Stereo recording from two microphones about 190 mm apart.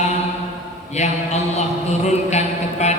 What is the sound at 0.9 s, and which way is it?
Speech, 35° left (ahead or behind).